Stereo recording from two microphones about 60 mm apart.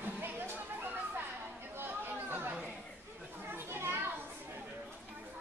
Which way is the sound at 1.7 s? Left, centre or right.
Right.